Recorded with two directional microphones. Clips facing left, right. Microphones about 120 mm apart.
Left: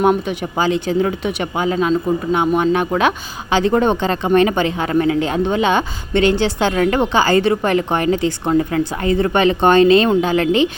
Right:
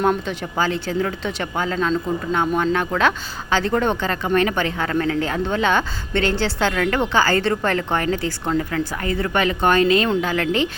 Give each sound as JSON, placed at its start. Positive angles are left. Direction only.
{"t": 0.0, "sound": "speech", "side_deg": 15}